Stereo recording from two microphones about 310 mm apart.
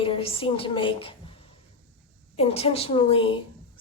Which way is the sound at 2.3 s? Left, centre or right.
Centre.